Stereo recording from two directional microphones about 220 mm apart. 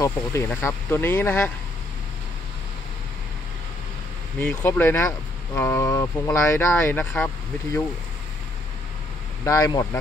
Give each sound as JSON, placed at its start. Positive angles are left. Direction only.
{"t": 0.0, "sound": "speech", "side_deg": 15}
{"t": 4.4, "sound": "speech", "side_deg": 10}
{"t": 9.4, "sound": "speech", "side_deg": 15}